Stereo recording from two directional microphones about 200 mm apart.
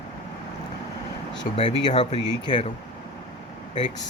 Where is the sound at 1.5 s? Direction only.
25° left (ahead or behind).